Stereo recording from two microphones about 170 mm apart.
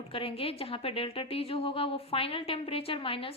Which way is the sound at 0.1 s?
35° left (ahead or behind).